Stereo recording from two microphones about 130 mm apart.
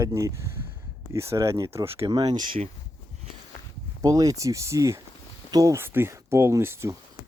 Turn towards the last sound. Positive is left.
turn(degrees=-20)  # may be behind; listen again after turning